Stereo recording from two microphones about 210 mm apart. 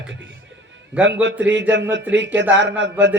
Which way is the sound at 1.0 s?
55° right (ahead or behind).